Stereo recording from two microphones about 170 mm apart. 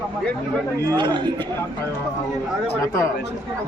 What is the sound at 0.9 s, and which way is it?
Speech, 25° right (ahead or behind).